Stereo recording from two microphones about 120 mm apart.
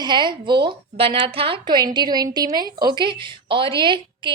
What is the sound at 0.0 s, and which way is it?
A woman's voice, 40° right (ahead or behind).